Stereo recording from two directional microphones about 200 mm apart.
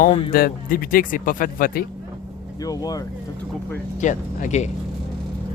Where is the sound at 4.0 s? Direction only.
35° left (ahead or behind).